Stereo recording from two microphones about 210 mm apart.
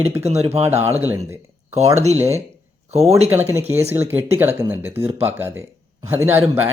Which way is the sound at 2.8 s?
30° right (ahead or behind).